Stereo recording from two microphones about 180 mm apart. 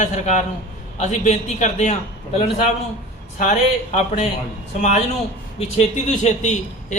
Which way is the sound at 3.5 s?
40° left (ahead or behind).